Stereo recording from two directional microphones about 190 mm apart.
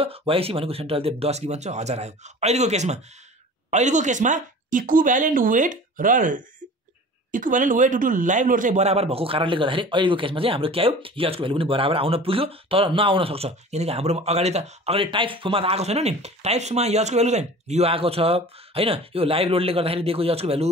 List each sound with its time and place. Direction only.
0.0 s a man's voice: 30° right (ahead or behind)